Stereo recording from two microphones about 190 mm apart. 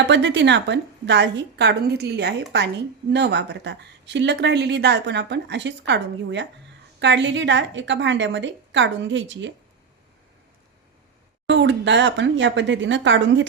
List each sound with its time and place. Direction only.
0.1 s a woman's voice: 65° right (ahead or behind)
11.4 s a woman's voice: 70° right (ahead or behind)